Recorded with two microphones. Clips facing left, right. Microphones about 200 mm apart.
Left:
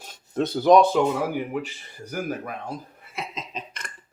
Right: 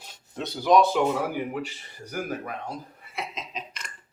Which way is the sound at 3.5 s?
55° left (ahead or behind).